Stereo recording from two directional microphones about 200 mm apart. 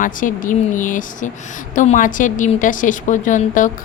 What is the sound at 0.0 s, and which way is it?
A woman's voice, 40° left (ahead or behind).